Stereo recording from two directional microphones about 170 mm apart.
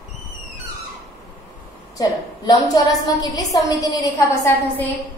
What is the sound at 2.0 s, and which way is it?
A woman's voice, 25° left (ahead or behind).